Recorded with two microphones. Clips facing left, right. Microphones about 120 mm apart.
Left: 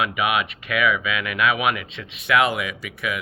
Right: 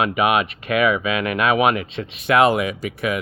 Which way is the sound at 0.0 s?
40° right (ahead or behind).